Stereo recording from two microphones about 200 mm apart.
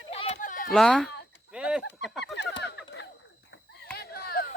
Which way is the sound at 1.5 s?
5° right (ahead or behind).